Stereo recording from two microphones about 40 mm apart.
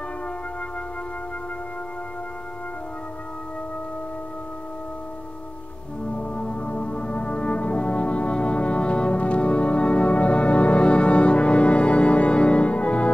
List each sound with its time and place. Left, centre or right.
6.1 s brass instrument: left